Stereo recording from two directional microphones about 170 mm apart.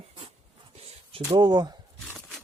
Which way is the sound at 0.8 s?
35° right (ahead or behind).